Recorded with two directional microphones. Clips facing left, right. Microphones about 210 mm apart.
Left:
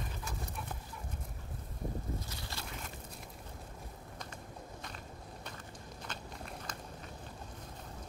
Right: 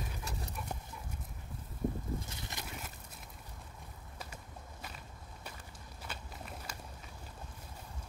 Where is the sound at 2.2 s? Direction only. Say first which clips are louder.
Even; 20° right (ahead or behind).